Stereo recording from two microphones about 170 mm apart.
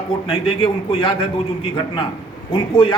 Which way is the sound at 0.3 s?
30° left (ahead or behind).